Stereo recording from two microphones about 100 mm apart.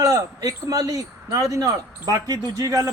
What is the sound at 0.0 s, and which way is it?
Speech, 35° right (ahead or behind).